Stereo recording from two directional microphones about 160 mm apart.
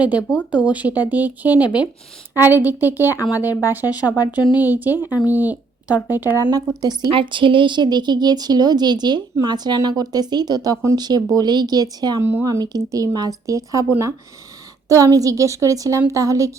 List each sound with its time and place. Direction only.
0.5 s speech: 10° right (ahead or behind)
5.0 s speech: 20° left (ahead or behind)
5.3 s speech: 10° right (ahead or behind)
6.4 s speech: 25° right (ahead or behind)
12.2 s speech: 15° right (ahead or behind)